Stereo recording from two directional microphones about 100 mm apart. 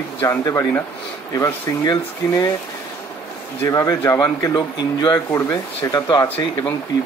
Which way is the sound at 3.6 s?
30° left (ahead or behind).